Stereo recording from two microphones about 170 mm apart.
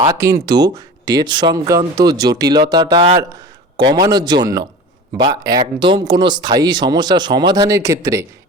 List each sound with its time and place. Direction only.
0.0 s speech: 20° right (ahead or behind)